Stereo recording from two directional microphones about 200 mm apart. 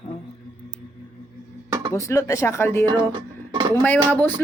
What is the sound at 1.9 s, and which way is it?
A woman's voice, 15° left (ahead or behind).